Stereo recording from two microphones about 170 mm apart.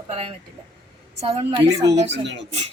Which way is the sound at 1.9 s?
40° right (ahead or behind).